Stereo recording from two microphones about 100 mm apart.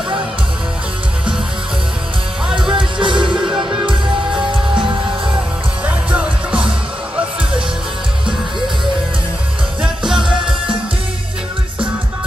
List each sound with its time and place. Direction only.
2.7 s music: 55° right (ahead or behind)
3.4 s music: 5° right (ahead or behind)
4.5 s music: 55° right (ahead or behind)
5.9 s music: 10° right (ahead or behind)
9.8 s music: 5° right (ahead or behind)